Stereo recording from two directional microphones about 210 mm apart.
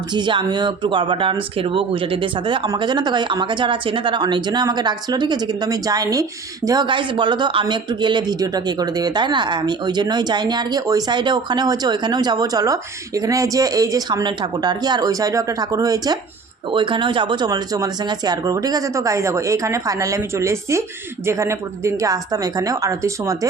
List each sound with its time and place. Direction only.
0.1 s speech: 20° right (ahead or behind)